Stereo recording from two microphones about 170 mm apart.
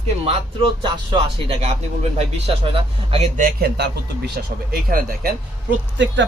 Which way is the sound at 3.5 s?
65° right (ahead or behind).